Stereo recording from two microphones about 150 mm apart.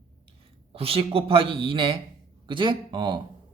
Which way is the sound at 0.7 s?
40° right (ahead or behind).